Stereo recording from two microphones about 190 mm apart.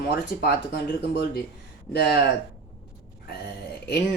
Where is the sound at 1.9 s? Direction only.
60° left (ahead or behind).